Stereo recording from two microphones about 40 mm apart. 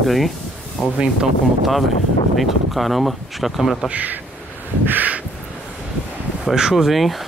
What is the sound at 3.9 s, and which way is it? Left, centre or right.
Speech, right.